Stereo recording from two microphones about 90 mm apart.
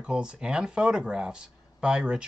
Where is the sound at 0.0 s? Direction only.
10° right (ahead or behind).